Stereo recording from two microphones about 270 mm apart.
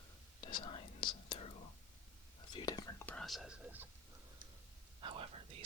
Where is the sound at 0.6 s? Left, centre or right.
Centre.